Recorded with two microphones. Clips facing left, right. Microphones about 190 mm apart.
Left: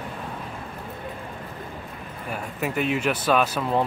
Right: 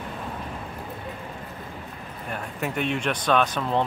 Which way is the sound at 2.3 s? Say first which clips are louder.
Left 2 dB; 5° left (ahead or behind).